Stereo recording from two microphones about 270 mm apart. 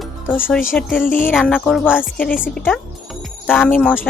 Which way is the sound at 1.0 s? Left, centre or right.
Left.